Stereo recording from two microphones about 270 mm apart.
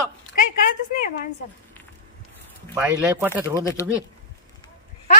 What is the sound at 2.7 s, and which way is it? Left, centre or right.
Speech, centre.